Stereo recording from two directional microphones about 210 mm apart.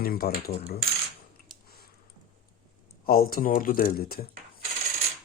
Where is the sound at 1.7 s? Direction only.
45° left (ahead or behind).